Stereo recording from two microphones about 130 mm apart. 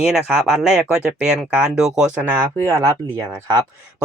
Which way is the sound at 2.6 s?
25° right (ahead or behind).